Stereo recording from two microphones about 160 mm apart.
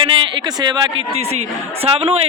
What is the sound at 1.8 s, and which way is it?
Speech, 35° right (ahead or behind).